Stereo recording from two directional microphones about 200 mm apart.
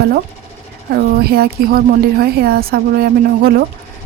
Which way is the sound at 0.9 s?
50° right (ahead or behind).